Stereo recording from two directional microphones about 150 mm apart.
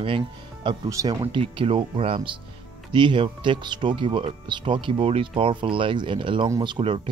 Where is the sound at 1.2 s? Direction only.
35° right (ahead or behind).